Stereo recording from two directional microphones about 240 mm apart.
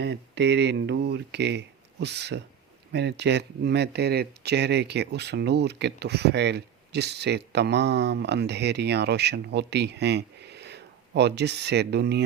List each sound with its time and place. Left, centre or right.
0.0 s speech: right